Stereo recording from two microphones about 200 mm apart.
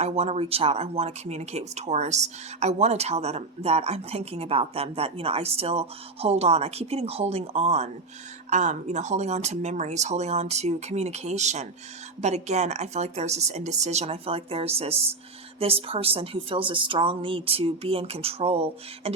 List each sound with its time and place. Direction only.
0.0 s speech: 30° right (ahead or behind)